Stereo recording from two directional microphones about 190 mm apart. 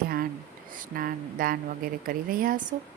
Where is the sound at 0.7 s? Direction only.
45° right (ahead or behind).